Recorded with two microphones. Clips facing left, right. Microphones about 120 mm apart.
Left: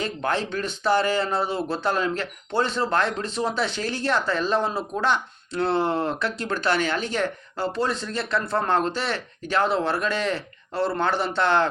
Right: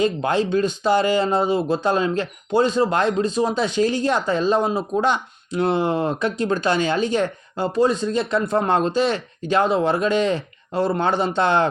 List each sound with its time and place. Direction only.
0.0 s speech: 15° right (ahead or behind)